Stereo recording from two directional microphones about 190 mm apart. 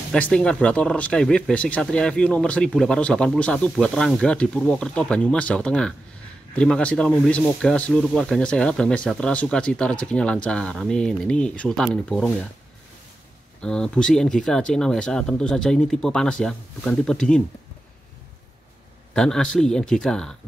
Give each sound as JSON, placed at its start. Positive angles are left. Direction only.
{"t": 0.1, "sound": "speech", "side_deg": 5}
{"t": 13.6, "sound": "speech", "side_deg": 5}
{"t": 19.1, "sound": "speech", "side_deg": 5}